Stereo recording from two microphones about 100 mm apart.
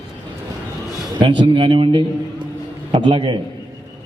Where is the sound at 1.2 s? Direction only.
50° right (ahead or behind).